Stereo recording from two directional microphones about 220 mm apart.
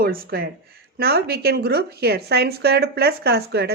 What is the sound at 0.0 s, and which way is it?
Speech, 40° right (ahead or behind).